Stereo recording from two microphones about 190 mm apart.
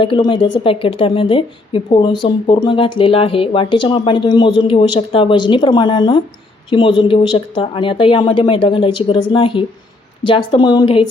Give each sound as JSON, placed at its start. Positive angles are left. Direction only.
{"t": 0.0, "sound": "a woman's voice", "side_deg": 25}